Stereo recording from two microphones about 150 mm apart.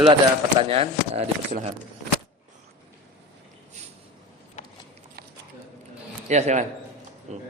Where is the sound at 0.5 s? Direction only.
40° right (ahead or behind).